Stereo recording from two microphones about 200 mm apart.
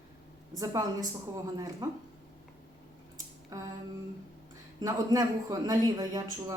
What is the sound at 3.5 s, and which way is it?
Speech, 15° right (ahead or behind).